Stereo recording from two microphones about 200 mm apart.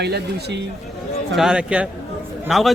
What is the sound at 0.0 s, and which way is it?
Speech, 55° right (ahead or behind).